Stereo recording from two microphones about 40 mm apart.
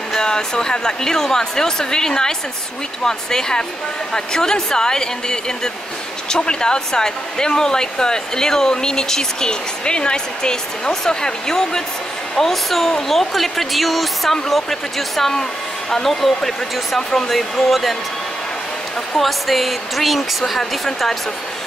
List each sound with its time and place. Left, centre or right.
0.1 s speech: centre
19.1 s speech: centre